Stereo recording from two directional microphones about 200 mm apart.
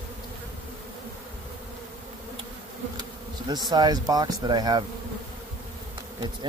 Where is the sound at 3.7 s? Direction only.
20° right (ahead or behind).